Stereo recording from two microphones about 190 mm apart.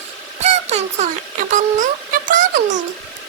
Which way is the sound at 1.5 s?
45° right (ahead or behind).